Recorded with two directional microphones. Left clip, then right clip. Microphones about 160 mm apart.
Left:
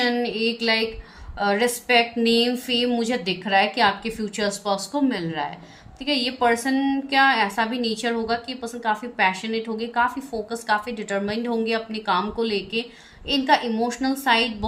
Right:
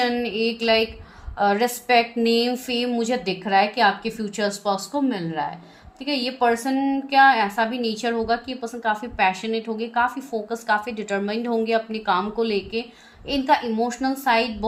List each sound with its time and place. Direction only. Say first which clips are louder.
0.0 s a woman's voice: even; 30° right (ahead or behind)